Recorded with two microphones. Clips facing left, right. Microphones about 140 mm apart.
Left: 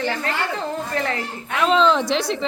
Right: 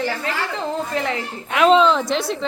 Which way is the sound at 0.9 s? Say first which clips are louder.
Even; 15° right (ahead or behind).